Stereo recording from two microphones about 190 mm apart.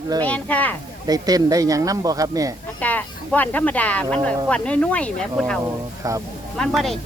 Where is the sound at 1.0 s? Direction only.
20° right (ahead or behind).